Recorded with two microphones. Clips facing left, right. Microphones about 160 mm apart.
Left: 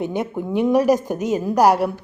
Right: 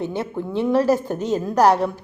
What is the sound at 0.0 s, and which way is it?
A woman's voice, 15° left (ahead or behind).